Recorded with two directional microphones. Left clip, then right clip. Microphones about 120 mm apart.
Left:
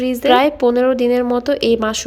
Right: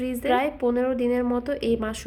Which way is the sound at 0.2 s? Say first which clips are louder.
Left 11 dB; 45° left (ahead or behind).